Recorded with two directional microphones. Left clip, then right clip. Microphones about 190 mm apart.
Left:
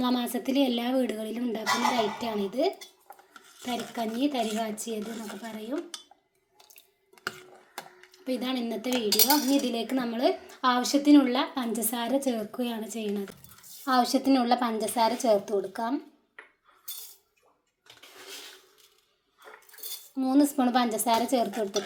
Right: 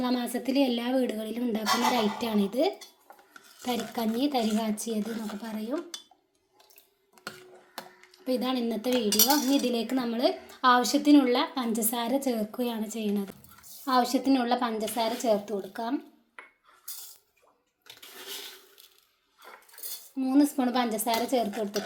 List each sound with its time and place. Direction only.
0.0 s a woman's voice: 10° left (ahead or behind)
1.9 s speech: 15° right (ahead or behind)
8.1 s speech: 5° right (ahead or behind)
13.8 s a woman's voice: 15° left (ahead or behind)
20.1 s a woman's voice: 15° left (ahead or behind)